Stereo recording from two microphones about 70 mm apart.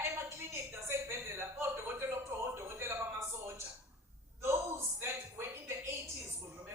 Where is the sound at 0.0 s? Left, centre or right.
Right.